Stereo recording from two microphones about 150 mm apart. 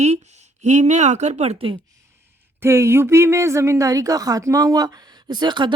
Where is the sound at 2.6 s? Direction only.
20° right (ahead or behind).